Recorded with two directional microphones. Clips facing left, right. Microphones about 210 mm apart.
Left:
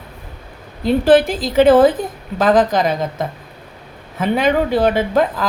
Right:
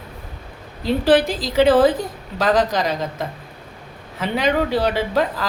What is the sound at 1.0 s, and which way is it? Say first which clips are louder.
Speech: left 3 dB; 50° left (ahead or behind).